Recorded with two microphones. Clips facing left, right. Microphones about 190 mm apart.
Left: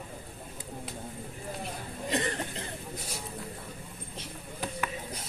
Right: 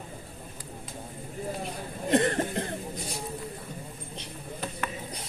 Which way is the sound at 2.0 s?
55° right (ahead or behind).